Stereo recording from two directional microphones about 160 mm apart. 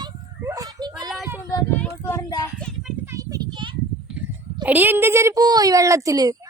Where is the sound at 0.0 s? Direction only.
20° right (ahead or behind).